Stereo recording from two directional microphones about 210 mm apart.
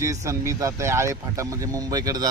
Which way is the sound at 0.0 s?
15° right (ahead or behind).